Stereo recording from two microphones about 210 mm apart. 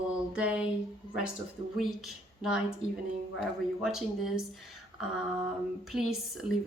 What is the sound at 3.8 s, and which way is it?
Speech, centre (ahead or behind).